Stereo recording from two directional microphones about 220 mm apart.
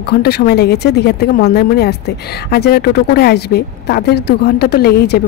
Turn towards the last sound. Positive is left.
turn(degrees=45)  # may be behind; listen again after turning